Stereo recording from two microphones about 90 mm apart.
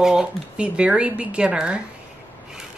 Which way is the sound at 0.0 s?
5° right (ahead or behind).